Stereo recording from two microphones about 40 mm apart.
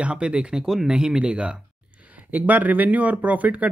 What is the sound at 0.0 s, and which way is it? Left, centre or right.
Speech, right.